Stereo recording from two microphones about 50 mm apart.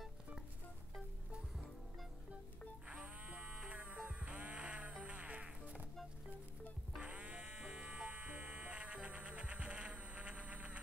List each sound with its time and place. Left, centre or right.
3.3 s music: right
5.0 s fly: right
7.0 s buzzer: right